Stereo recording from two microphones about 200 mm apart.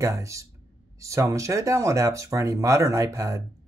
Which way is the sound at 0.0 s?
15° right (ahead or behind).